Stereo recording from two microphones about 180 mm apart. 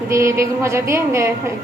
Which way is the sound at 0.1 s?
15° right (ahead or behind).